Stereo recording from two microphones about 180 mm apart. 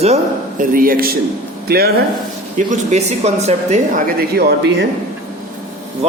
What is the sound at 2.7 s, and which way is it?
A man's voice, 40° right (ahead or behind).